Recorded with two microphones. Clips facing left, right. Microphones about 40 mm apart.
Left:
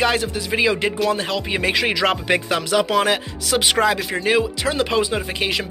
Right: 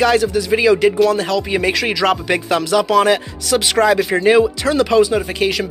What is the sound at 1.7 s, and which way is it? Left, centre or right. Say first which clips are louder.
Music: right 3 dB; centre.